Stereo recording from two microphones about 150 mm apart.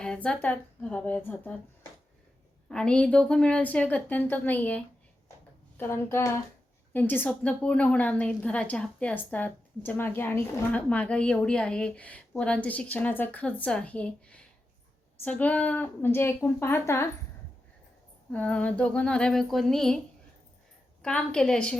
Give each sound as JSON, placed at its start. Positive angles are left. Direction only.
{"t": 0.0, "sound": "a sound", "side_deg": 5}
{"t": 0.4, "sound": "a woman's voice", "side_deg": 10}
{"t": 2.6, "sound": "a woman's voice", "side_deg": 5}
{"t": 18.3, "sound": "speech", "side_deg": 10}
{"t": 21.0, "sound": "speech", "side_deg": 5}